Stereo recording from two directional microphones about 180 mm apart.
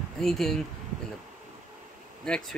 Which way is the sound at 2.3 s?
5° left (ahead or behind).